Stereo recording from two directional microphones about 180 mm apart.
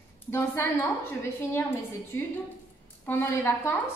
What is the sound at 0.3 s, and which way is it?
Speech, 10° left (ahead or behind).